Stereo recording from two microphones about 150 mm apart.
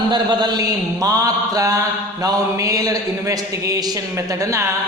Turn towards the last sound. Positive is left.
turn(degrees=-20)  # may be behind; listen again after turning